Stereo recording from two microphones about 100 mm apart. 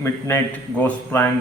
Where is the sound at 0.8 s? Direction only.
20° left (ahead or behind).